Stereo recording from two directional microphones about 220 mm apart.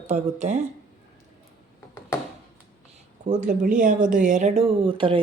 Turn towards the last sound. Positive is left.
turn(degrees=-25)  # may be behind; listen again after turning